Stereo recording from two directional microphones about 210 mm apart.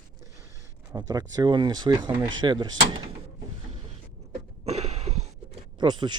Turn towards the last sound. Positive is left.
turn(degrees=-20)  # may be behind; listen again after turning